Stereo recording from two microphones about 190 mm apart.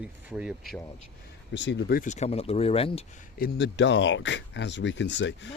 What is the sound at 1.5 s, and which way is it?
Speech, 70° left (ahead or behind).